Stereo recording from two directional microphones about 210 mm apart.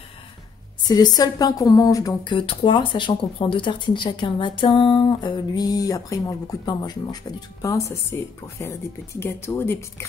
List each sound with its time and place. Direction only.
0.8 s speech: 20° left (ahead or behind)